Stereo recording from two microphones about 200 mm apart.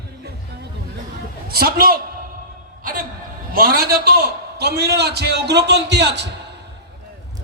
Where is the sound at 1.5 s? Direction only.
50° right (ahead or behind).